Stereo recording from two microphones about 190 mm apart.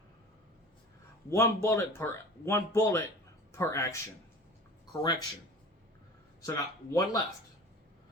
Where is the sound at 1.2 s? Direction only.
15° left (ahead or behind).